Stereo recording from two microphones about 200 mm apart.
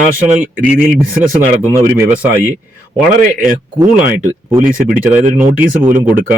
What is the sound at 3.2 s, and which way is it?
Speech, 45° right (ahead or behind).